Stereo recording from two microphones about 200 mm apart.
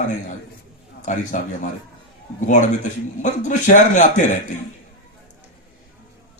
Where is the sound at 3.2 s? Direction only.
40° left (ahead or behind).